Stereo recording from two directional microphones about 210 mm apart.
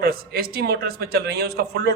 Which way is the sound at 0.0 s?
45° right (ahead or behind).